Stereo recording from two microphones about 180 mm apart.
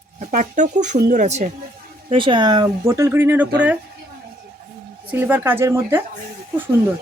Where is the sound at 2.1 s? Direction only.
30° right (ahead or behind); by 3.4 s 10° right (ahead or behind).